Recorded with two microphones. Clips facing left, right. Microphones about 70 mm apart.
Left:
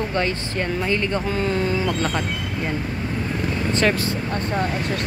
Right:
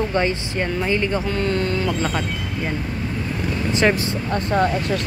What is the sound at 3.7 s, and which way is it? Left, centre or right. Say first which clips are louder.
Speech: right 2 dB; centre.